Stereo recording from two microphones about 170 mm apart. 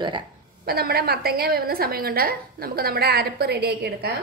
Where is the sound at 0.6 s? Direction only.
65° right (ahead or behind).